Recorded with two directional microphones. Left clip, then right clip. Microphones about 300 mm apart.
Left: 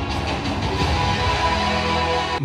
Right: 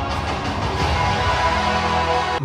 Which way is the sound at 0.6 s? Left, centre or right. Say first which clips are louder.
Right 1 dB; right.